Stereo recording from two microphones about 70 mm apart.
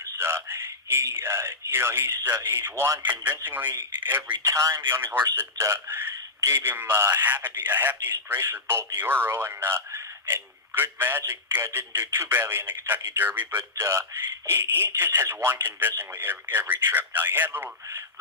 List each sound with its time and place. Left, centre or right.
0.2 s a man's voice: right
3.0 s speech: right
4.5 s a man's voice: right
13.7 s a man's voice: right